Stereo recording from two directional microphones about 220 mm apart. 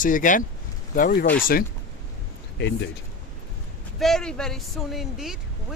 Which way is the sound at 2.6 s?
50° left (ahead or behind).